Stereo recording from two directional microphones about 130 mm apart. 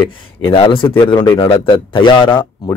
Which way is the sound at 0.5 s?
40° left (ahead or behind).